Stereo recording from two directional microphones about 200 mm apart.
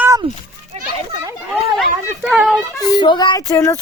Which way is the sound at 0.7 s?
35° right (ahead or behind).